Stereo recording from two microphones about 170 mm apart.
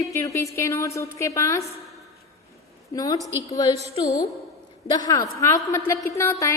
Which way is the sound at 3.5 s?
25° left (ahead or behind).